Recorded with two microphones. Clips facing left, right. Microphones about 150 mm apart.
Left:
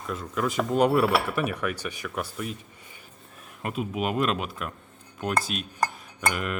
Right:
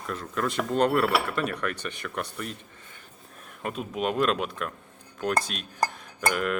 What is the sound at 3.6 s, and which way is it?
Speech, 5° left (ahead or behind).